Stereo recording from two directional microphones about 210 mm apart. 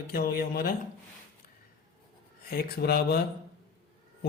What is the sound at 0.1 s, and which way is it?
Speech, 45° left (ahead or behind).